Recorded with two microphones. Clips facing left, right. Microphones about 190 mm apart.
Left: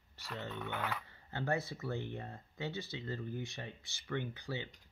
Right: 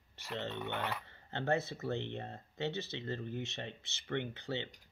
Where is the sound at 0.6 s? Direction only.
Centre (ahead or behind).